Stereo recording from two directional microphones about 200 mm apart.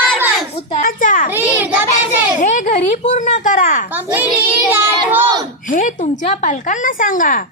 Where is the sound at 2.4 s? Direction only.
40° left (ahead or behind).